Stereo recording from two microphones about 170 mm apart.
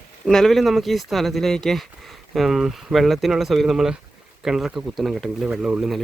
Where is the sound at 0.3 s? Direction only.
5° left (ahead or behind).